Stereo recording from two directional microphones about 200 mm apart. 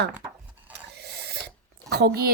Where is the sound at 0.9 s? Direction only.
55° right (ahead or behind).